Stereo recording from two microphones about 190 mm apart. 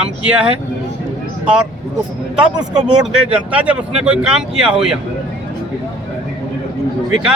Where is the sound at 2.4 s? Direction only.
5° right (ahead or behind).